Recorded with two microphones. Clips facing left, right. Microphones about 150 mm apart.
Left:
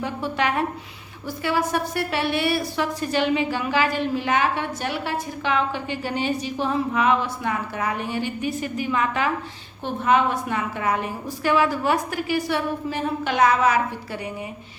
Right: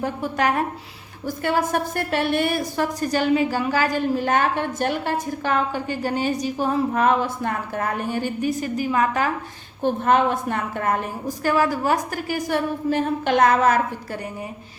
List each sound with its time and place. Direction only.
0.0 s a woman's voice: 45° right (ahead or behind)